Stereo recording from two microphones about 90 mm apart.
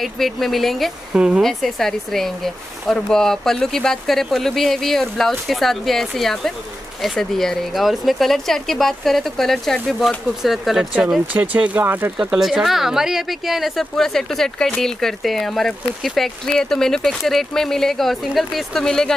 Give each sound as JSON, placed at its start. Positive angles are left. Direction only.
{"t": 0.0, "sound": "speech", "side_deg": 0}
{"t": 1.1, "sound": "speech", "side_deg": -10}
{"t": 1.4, "sound": "speech", "side_deg": 5}
{"t": 11.3, "sound": "speech", "side_deg": -15}
{"t": 12.2, "sound": "speech", "side_deg": -5}